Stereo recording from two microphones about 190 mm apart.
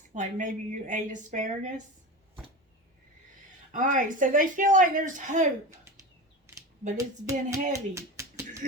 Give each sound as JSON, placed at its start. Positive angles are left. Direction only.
{"t": 0.1, "sound": "a woman's voice", "side_deg": -40}
{"t": 3.7, "sound": "speech", "side_deg": -45}
{"t": 6.9, "sound": "speech", "side_deg": -15}